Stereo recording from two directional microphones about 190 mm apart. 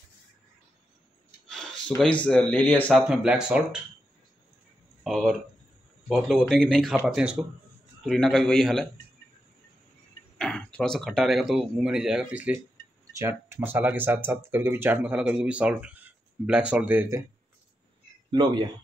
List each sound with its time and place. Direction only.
1.5 s a sound: 5° left (ahead or behind)
2.2 s speech: 10° left (ahead or behind)
5.0 s speech: centre (ahead or behind)
10.3 s speech: 5° left (ahead or behind)
18.3 s speech: 25° right (ahead or behind)